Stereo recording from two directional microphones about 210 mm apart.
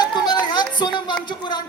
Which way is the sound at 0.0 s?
20° left (ahead or behind).